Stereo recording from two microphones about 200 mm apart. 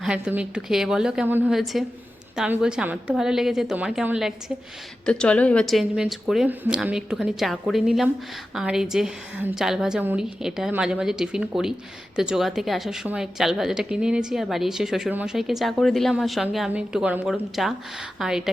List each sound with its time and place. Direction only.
0.0 s a woman's voice: 5° right (ahead or behind)